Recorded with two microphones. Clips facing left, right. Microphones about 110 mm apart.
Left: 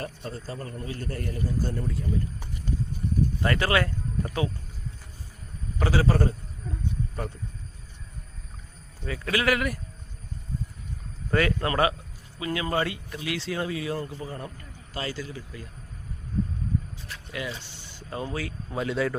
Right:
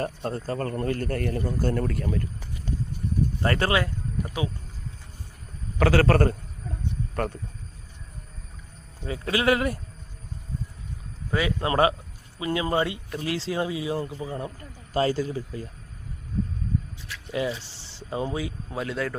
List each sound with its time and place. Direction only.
0.0 s a man's voice: 50° right (ahead or behind); by 2.2 s 70° right (ahead or behind)
3.4 s speech: 40° right (ahead or behind)
3.7 s speech: 20° right (ahead or behind)
5.8 s a man's voice: 75° right (ahead or behind)
9.0 s speech: 25° right (ahead or behind)
11.3 s speech: 10° right (ahead or behind)
11.6 s speech: 30° right (ahead or behind)
13.1 s speech: 35° right (ahead or behind); by 14.5 s 15° right (ahead or behind)
14.9 s speech: 40° right (ahead or behind)
17.3 s speech: 30° right (ahead or behind)
18.1 s speech: 15° right (ahead or behind)
18.7 s speech: centre (ahead or behind)